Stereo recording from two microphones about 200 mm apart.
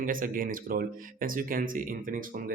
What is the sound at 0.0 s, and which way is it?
Speech, 45° right (ahead or behind).